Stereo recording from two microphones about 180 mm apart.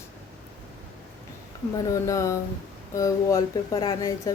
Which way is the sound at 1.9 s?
15° left (ahead or behind).